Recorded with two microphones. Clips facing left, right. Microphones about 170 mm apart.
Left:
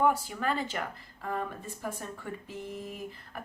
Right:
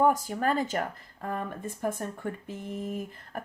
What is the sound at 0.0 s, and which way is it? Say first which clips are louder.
Speech: right 3 dB; 45° right (ahead or behind).